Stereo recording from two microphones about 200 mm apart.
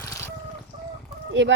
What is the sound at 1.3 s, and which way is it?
Speech, 65° right (ahead or behind).